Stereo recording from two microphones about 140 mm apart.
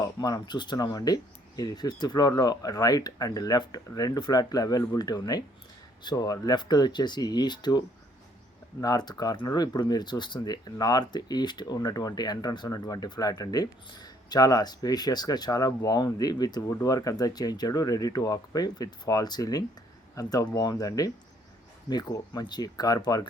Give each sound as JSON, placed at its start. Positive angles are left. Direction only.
{"t": 0.0, "sound": "speech", "side_deg": 25}